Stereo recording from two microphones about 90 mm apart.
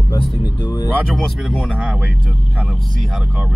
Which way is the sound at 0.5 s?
60° left (ahead or behind).